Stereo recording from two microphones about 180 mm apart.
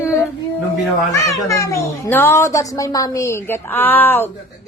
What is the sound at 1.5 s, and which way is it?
A child's voice, 15° left (ahead or behind).